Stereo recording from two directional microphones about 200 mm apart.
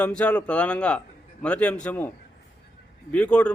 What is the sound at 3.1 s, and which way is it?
Speech, 5° left (ahead or behind).